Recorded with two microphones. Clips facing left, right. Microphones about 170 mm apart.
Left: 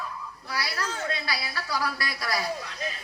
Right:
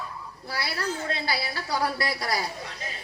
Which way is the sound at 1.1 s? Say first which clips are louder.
Right 3 dB; 30° right (ahead or behind).